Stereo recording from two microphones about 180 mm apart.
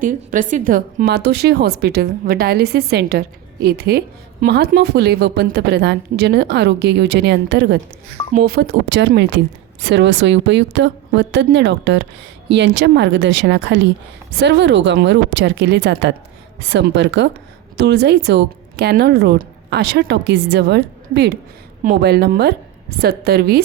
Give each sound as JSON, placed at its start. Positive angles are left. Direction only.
{"t": 0.0, "sound": "a woman's voice", "side_deg": -50}
{"t": 8.3, "sound": "a woman's voice", "side_deg": -55}
{"t": 17.7, "sound": "a woman's voice", "side_deg": -70}